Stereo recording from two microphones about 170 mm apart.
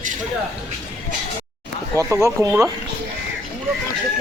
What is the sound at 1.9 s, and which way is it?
Speech, 15° right (ahead or behind).